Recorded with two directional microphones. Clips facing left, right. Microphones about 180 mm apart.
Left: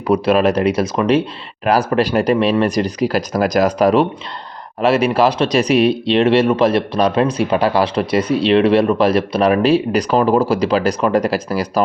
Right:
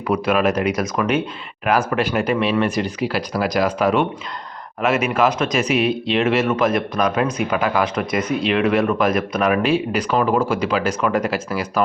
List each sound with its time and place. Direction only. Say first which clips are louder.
0.1 s speech: left 4 dB; 35° left (ahead or behind)